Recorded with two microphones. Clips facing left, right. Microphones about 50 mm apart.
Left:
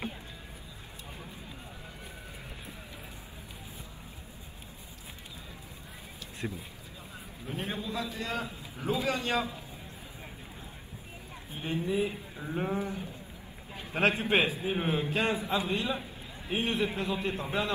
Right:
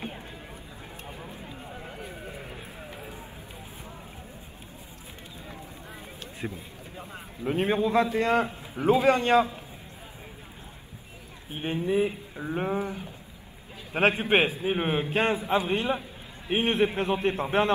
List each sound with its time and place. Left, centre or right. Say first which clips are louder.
7.4 s a man's voice: right 11 dB; right
11.6 s a man's voice: right 5 dB; right
12.8 s speech: right 2 dB; right
13.9 s a man's voice: right 4 dB; right